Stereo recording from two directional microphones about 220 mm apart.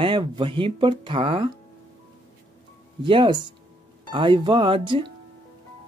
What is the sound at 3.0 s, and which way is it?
Speech, 20° right (ahead or behind).